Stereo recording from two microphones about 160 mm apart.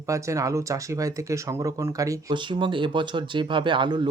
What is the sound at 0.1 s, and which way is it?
Speech, 20° right (ahead or behind).